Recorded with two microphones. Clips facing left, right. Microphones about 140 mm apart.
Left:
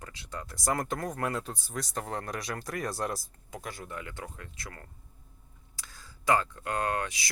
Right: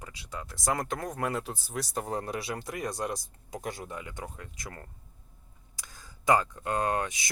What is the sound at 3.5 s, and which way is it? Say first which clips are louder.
Speech: right 3 dB; 20° right (ahead or behind).